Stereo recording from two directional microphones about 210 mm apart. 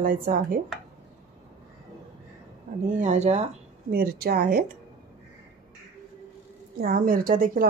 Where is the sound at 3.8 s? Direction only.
45° right (ahead or behind).